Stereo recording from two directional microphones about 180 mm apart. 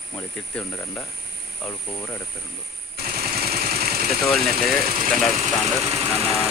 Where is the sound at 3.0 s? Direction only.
60° right (ahead or behind).